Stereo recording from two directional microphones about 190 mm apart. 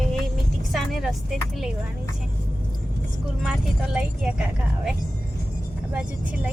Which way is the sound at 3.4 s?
5° right (ahead or behind).